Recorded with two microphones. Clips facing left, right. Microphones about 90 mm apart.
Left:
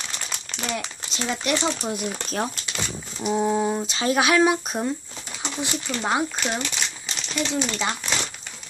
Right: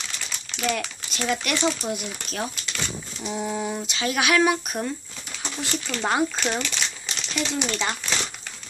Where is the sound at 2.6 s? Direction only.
15° left (ahead or behind).